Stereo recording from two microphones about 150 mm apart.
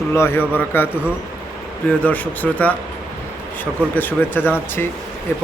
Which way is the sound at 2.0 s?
10° left (ahead or behind).